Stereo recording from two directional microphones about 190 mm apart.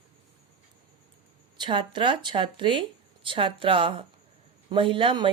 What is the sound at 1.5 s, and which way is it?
Speech, 25° right (ahead or behind).